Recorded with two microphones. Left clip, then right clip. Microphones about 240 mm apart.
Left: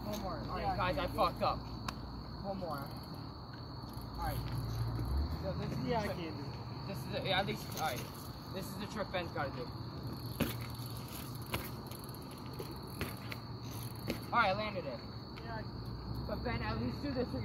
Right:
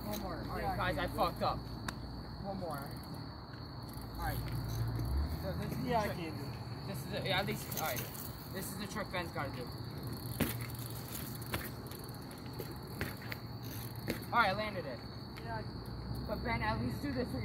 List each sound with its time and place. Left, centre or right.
0.1 s a sound: centre
5.6 s speech: right
6.9 s speech: centre
8.5 s speech: centre
10.4 s a sound: centre
14.0 s speech: centre
16.4 s speech: centre